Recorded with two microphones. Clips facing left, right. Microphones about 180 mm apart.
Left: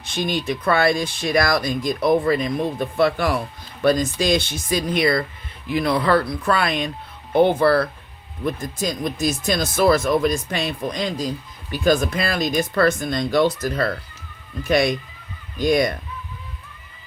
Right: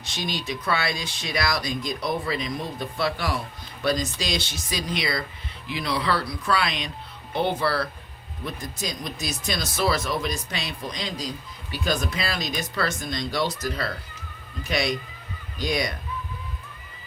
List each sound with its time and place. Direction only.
0.0 s speech: 55° left (ahead or behind)